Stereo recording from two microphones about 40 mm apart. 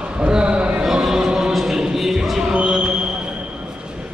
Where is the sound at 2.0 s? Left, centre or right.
Centre.